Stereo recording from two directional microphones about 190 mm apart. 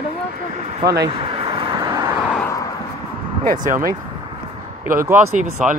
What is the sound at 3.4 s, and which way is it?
Speech, 45° right (ahead or behind).